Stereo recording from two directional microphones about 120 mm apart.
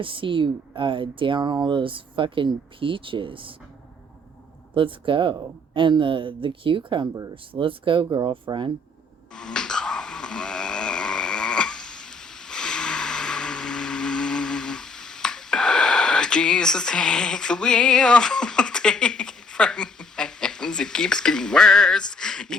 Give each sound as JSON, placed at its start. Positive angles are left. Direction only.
{"t": 0.0, "sound": "speech", "side_deg": -45}
{"t": 4.7, "sound": "speech", "side_deg": -45}
{"t": 7.1, "sound": "speech", "side_deg": -30}
{"t": 7.5, "sound": "speech", "side_deg": -45}
{"t": 9.3, "sound": "snoring", "side_deg": 5}